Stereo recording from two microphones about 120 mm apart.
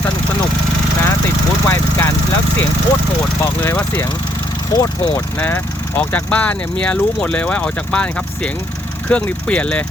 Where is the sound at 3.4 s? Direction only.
20° left (ahead or behind).